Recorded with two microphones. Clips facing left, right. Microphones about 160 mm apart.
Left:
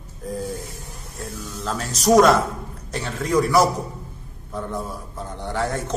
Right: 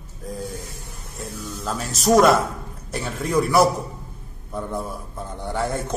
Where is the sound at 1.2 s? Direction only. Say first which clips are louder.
Even; 5° right (ahead or behind).